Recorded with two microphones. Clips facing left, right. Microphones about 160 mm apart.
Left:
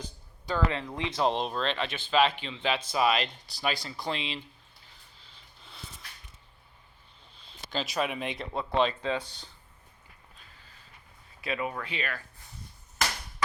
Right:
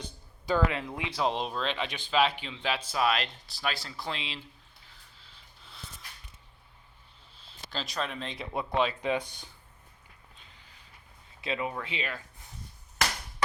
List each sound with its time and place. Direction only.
0.4 s speech: 10° right (ahead or behind)
2.9 s speech: centre (ahead or behind)
7.4 s speech: centre (ahead or behind)
8.5 s speech: 10° right (ahead or behind)
10.3 s a sound: 20° right (ahead or behind)
11.3 s speech: 25° right (ahead or behind)